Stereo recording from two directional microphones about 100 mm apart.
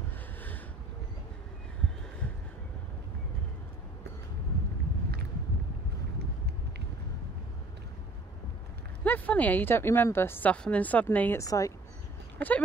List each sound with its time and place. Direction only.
9.0 s a woman's voice: 15° left (ahead or behind)
11.3 s speech: 35° left (ahead or behind)
12.4 s speech: 15° left (ahead or behind)